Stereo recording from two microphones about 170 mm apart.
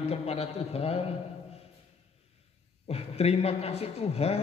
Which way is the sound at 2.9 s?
35° left (ahead or behind).